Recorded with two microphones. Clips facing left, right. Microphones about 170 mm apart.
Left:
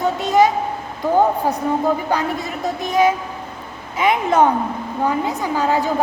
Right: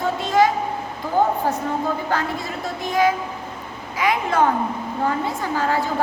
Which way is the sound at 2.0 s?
20° left (ahead or behind).